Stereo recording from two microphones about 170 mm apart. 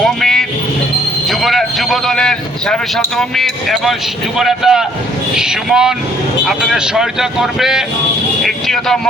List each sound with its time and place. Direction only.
0.0 s vehicle: centre (ahead or behind)
1.3 s a man's voice: centre (ahead or behind)